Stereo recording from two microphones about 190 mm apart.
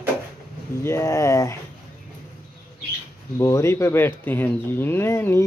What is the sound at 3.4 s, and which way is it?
Speech, 15° left (ahead or behind).